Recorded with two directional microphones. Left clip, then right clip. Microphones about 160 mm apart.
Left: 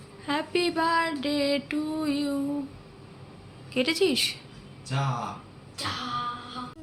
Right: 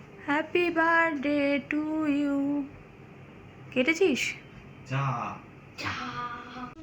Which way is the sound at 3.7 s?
Centre (ahead or behind).